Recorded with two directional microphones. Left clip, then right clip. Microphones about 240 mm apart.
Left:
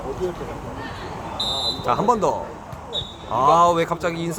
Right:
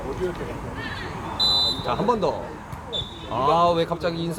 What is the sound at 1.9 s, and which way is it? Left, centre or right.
Speech, left.